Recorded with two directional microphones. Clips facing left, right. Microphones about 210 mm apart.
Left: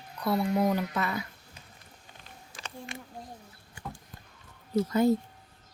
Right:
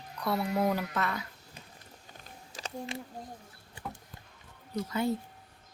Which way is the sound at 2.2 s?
40° right (ahead or behind).